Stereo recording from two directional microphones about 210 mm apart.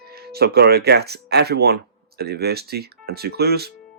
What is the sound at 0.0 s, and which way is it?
Speech, 50° right (ahead or behind).